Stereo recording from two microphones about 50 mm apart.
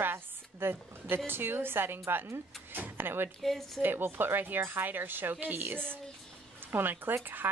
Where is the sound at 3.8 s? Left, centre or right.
Right.